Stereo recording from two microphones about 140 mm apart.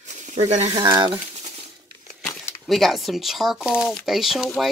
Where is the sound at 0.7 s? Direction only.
35° right (ahead or behind).